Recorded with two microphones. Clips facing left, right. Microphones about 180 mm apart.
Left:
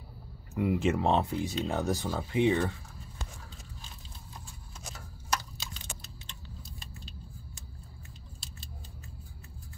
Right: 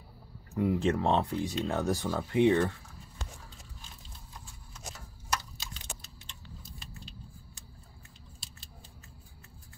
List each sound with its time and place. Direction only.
0.6 s speech: 10° left (ahead or behind)
1.8 s speech: 20° left (ahead or behind)
2.3 s speech: 5° left (ahead or behind)